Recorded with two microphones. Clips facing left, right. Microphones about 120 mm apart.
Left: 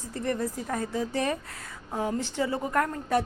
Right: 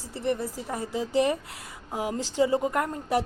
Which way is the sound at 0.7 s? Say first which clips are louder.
Right 3 dB; 15° right (ahead or behind).